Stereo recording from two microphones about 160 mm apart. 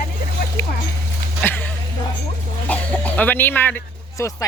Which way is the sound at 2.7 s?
10° left (ahead or behind).